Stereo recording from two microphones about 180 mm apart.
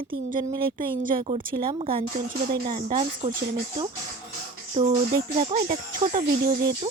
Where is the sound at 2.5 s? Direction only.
50° right (ahead or behind).